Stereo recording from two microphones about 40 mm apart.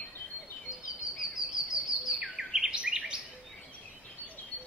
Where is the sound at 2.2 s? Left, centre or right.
Centre.